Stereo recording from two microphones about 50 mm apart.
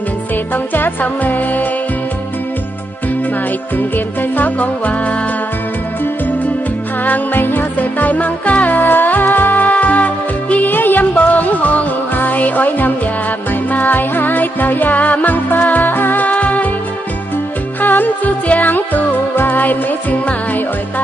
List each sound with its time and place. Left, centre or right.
0.5 s music: left
3.8 s music: left
7.0 s music: left
17.7 s music: left